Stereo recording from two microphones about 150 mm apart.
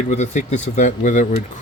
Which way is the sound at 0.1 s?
50° left (ahead or behind).